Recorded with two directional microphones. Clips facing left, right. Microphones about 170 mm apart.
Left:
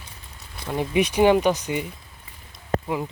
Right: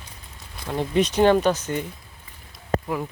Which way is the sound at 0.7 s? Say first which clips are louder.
Even; 10° left (ahead or behind).